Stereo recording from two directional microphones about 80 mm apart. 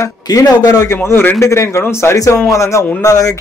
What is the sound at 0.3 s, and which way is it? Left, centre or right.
Speech, left.